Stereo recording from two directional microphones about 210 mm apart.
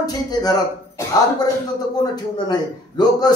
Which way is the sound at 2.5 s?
20° left (ahead or behind).